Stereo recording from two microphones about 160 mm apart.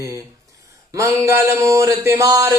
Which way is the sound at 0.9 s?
20° right (ahead or behind).